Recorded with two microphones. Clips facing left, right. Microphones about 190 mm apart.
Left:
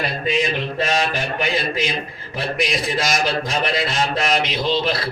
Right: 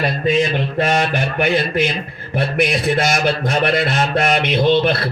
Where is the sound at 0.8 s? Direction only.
55° right (ahead or behind).